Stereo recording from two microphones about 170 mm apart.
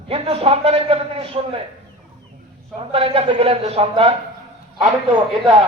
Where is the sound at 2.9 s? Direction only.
35° right (ahead or behind).